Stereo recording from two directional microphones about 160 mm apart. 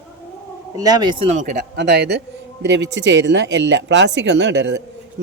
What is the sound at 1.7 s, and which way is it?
A man's voice, 90° right.